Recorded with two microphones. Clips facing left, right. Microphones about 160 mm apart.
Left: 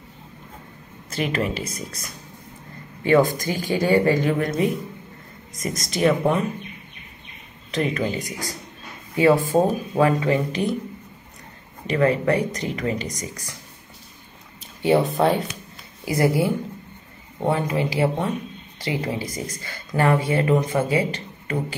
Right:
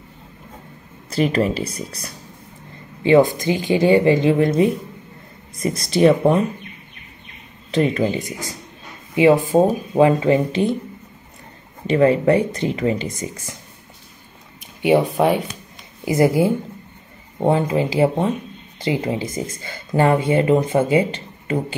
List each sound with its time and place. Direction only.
1.1 s speech: 35° right (ahead or behind)
3.0 s speech: 20° right (ahead or behind)
7.7 s speech: 35° right (ahead or behind)
9.1 s speech: 15° right (ahead or behind)
11.9 s speech: 30° right (ahead or behind)
14.6 s speech: 15° right (ahead or behind)
16.1 s speech: 25° right (ahead or behind)